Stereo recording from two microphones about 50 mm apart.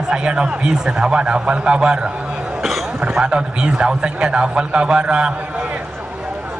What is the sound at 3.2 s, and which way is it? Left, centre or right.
A man's voice, centre.